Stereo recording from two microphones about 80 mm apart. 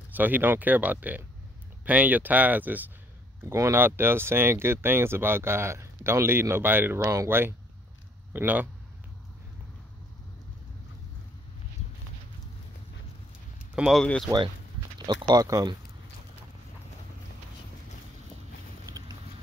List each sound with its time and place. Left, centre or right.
0.1 s speech: right
3.4 s speech: right
3.7 s speech: right
13.8 s speech: centre
15.0 s speech: right
18.9 s vehicle: right